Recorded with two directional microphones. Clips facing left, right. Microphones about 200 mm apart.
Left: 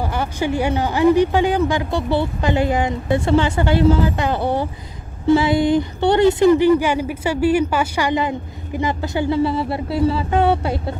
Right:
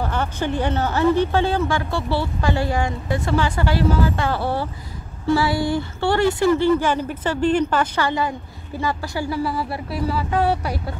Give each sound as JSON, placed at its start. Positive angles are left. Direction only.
{"t": 0.0, "sound": "speech", "side_deg": 10}